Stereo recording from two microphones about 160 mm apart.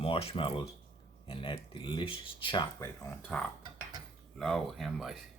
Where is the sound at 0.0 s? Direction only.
40° left (ahead or behind).